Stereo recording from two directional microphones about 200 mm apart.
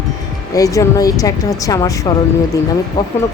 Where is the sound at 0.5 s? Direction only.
15° left (ahead or behind).